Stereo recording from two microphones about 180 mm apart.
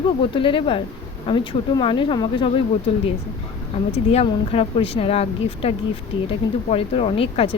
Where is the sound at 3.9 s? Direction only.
35° left (ahead or behind).